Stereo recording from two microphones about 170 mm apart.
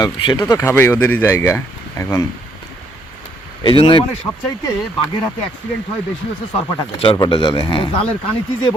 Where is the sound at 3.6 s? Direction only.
30° left (ahead or behind).